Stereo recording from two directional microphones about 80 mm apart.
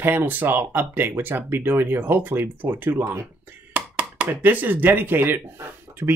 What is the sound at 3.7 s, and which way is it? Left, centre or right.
Speech, centre.